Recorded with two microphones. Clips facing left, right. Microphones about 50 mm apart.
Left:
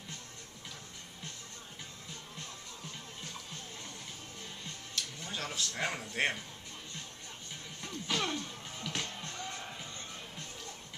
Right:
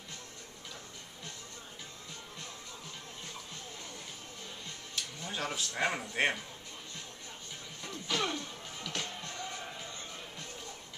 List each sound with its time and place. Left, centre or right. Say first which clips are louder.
5.2 s a man's voice: right 3 dB; centre
7.8 s music: right 1 dB; centre